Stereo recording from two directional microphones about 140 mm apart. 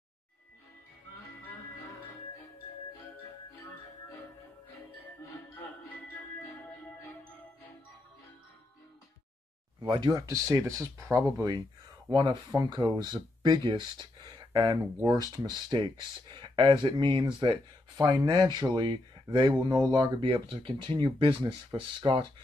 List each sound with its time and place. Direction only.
9.8 s speech: 30° right (ahead or behind)
12.1 s speech: 35° right (ahead or behind)